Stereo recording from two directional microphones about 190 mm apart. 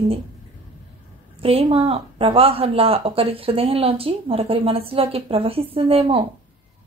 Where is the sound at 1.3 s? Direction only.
30° right (ahead or behind).